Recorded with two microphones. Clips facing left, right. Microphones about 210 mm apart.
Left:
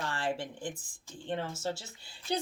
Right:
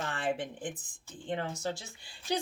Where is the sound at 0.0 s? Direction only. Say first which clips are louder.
Right 1 dB; 20° right (ahead or behind).